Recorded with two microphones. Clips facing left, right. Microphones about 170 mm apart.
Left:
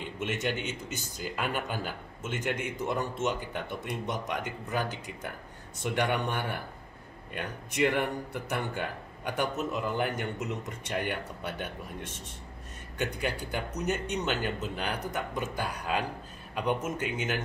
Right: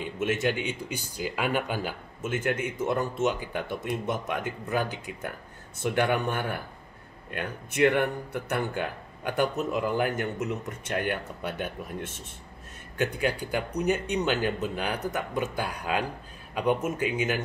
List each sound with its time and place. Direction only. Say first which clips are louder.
0.0 s speech: right 5 dB; 5° right (ahead or behind)
8.3 s speech: right 4 dB; 5° right (ahead or behind)
12.9 s speech: right 5 dB; 5° right (ahead or behind)